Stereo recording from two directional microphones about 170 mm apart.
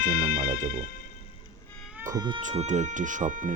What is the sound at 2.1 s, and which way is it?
Speech, 25° right (ahead or behind).